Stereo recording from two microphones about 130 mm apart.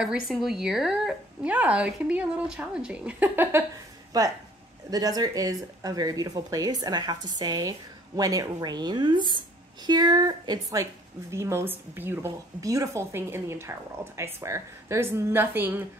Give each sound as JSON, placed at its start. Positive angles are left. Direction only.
{"t": 0.0, "sound": "speech", "side_deg": -5}
{"t": 4.1, "sound": "a woman's voice", "side_deg": -30}